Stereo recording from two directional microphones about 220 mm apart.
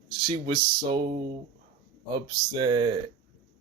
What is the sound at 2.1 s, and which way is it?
Speech, 20° right (ahead or behind).